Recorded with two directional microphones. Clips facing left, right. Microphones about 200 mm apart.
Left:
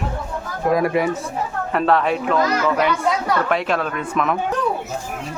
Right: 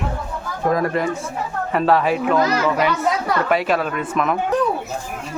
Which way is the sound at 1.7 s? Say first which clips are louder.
Right 1 dB; 5° right (ahead or behind).